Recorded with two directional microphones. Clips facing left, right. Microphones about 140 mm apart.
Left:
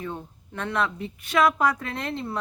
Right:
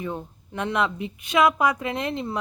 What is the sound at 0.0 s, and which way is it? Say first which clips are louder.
A woman's voice: right 3 dB; 15° right (ahead or behind).